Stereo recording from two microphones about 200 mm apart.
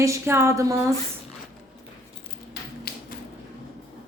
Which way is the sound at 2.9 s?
50° left (ahead or behind).